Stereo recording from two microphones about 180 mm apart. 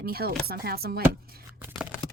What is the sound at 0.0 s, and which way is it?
A woman's voice, 60° right (ahead or behind).